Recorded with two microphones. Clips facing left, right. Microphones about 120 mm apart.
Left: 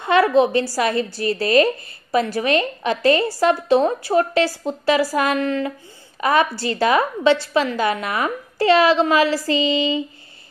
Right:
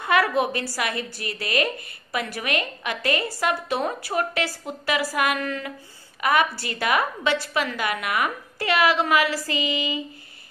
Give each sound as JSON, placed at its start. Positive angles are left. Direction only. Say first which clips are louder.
{"t": 0.0, "sound": "a woman's voice", "louder": "left 6 dB", "side_deg": 25}